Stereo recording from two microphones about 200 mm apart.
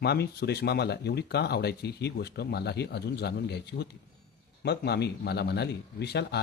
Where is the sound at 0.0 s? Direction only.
55° left (ahead or behind).